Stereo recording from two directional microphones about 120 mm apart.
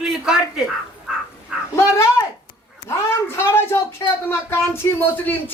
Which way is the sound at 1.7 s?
20° left (ahead or behind).